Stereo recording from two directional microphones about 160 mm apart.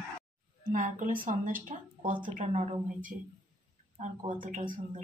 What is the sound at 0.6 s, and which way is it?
Speech, 55° right (ahead or behind).